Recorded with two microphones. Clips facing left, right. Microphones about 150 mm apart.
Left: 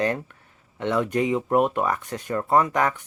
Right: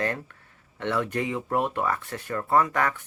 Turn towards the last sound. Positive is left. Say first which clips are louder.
# left 2 dB
turn(degrees=20)  # may be behind; listen again after turning